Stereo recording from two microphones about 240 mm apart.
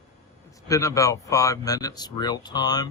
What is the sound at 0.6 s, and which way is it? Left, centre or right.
Speech, centre.